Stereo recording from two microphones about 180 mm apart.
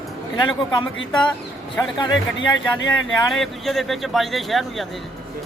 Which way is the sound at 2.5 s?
90° left.